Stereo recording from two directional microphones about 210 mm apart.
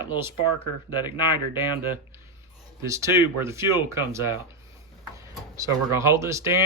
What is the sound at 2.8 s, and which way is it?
Speech, 15° right (ahead or behind).